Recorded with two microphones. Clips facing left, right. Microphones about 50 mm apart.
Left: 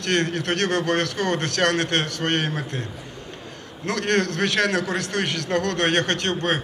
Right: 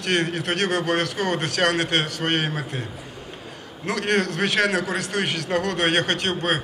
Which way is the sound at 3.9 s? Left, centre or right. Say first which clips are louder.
Even; centre.